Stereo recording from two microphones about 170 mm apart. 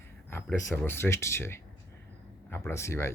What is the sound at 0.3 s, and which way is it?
Speech, 15° left (ahead or behind).